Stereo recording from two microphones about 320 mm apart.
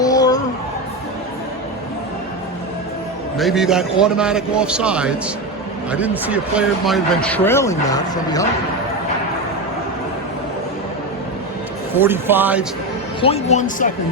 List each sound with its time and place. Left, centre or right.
0.0 s music: centre
3.3 s speech: centre
11.9 s speech: centre
13.2 s speech: centre